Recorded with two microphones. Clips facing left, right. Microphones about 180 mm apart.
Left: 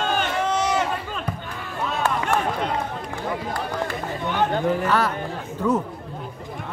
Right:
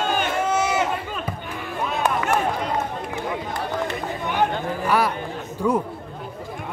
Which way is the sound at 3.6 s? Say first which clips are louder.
Right 1 dB; 15° right (ahead or behind).